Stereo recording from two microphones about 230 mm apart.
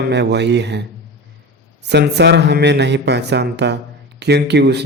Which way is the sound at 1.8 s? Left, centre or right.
Right.